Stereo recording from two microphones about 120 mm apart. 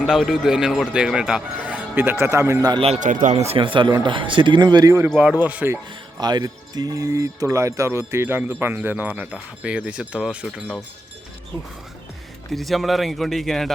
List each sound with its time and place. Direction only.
0.0 s speech: 5° right (ahead or behind); by 2.6 s 25° right (ahead or behind)
2.8 s speech: 75° right (ahead or behind)
3.6 s speech: 45° right (ahead or behind)
5.4 s speech: 15° right (ahead or behind)
6.1 s speech: 35° right (ahead or behind); by 10.5 s 5° right (ahead or behind)
12.5 s speech: centre (ahead or behind)